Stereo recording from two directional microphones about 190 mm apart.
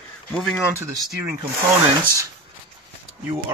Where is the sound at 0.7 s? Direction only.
15° right (ahead or behind).